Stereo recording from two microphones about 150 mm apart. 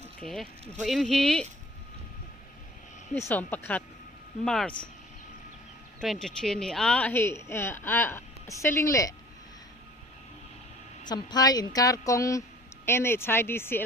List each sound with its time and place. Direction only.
0.2 s speech: centre (ahead or behind)
3.2 s a woman's voice: 15° left (ahead or behind)
6.0 s a woman's voice: 5° left (ahead or behind); by 9.1 s 20° left (ahead or behind)
11.1 s a woman's voice: 30° left (ahead or behind)